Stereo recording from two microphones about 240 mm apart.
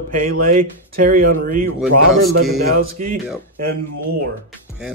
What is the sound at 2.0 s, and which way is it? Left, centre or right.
Speech, left.